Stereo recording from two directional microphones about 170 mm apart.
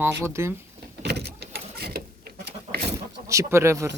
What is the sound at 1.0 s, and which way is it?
Vehicle, 80° right.